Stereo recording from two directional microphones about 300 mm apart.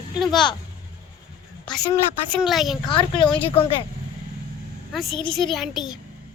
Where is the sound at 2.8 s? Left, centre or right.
Centre.